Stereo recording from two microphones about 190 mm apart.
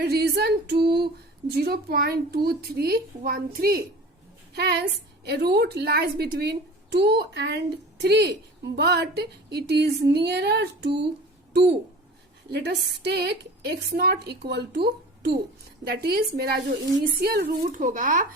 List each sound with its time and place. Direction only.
0.0 s a woman's voice: 55° right (ahead or behind)
4.5 s a woman's voice: 60° right (ahead or behind)
12.5 s a woman's voice: 60° right (ahead or behind); by 18.3 s 45° right (ahead or behind)